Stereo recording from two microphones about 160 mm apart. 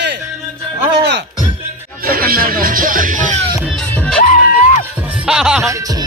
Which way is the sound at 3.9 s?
10° left (ahead or behind).